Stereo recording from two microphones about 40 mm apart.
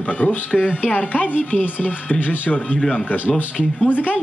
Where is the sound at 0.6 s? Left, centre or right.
Left.